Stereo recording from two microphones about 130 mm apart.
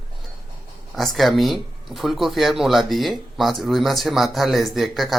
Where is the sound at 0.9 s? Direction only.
Centre (ahead or behind).